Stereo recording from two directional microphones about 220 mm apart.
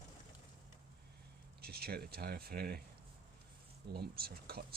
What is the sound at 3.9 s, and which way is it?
Speech, 45° right (ahead or behind).